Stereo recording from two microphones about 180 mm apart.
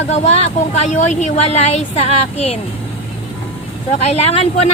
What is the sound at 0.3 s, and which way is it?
Speech, 35° left (ahead or behind).